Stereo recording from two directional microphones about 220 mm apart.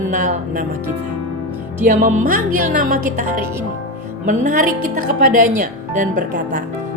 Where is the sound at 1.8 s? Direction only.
35° right (ahead or behind).